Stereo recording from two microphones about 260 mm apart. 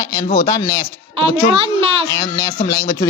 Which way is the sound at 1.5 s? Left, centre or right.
Centre.